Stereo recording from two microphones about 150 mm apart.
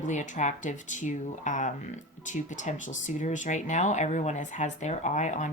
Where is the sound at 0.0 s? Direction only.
55° left (ahead or behind).